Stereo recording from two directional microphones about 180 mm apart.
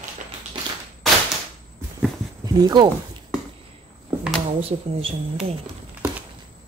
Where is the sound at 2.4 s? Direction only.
20° right (ahead or behind).